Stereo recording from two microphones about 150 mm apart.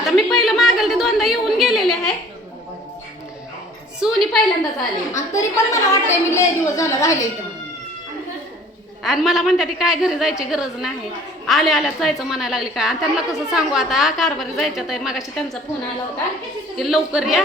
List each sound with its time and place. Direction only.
0.0 s a woman's voice: centre (ahead or behind)
4.0 s a woman's voice: centre (ahead or behind)
5.1 s a woman's voice: 20° left (ahead or behind)
9.0 s a woman's voice: centre (ahead or behind)
16.7 s a woman's voice: centre (ahead or behind)